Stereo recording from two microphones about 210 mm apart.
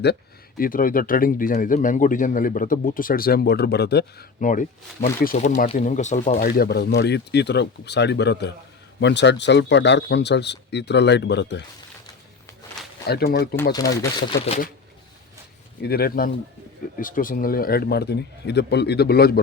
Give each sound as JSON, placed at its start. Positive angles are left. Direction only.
{"t": 0.0, "sound": "a man's voice", "side_deg": 50}
{"t": 13.1, "sound": "speech", "side_deg": 50}
{"t": 15.8, "sound": "speech", "side_deg": 45}